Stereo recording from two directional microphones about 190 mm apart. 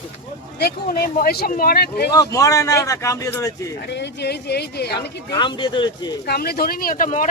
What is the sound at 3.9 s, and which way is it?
Speech, 60° left (ahead or behind).